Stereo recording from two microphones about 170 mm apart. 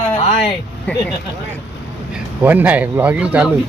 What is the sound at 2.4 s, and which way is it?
Speech, 10° right (ahead or behind).